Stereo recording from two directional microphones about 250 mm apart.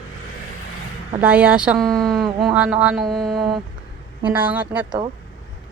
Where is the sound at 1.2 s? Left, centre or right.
Centre.